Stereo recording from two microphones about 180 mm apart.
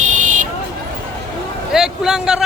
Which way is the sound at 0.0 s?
45° right (ahead or behind).